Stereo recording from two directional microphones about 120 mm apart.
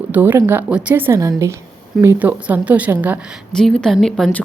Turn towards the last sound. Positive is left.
turn(degrees=5)  # may be behind; listen again after turning